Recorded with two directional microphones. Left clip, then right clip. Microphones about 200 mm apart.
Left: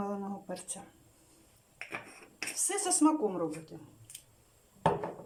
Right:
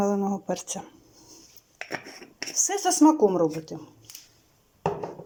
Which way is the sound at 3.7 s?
55° right (ahead or behind).